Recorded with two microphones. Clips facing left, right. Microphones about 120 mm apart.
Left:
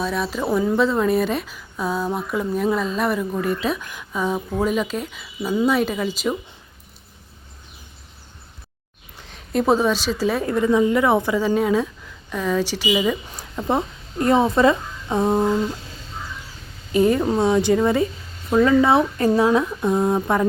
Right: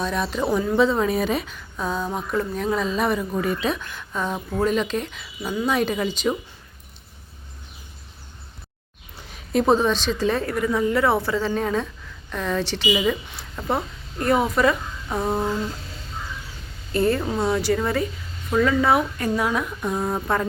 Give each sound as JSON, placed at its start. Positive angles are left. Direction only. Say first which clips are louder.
{"t": 0.0, "sound": "speech", "louder": "even", "side_deg": 0}
{"t": 9.3, "sound": "a woman's voice", "louder": "even", "side_deg": 0}
{"t": 10.4, "sound": "a woman's voice", "louder": "left 4 dB", "side_deg": 20}
{"t": 13.7, "sound": "a woman's voice", "louder": "left 3 dB", "side_deg": 20}
{"t": 16.9, "sound": "a woman's voice", "louder": "left 4 dB", "side_deg": 15}